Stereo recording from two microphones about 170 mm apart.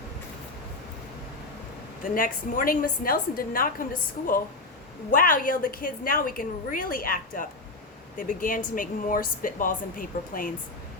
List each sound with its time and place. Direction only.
2.1 s a woman's voice: 55° left (ahead or behind)
5.1 s a woman's voice: 55° left (ahead or behind)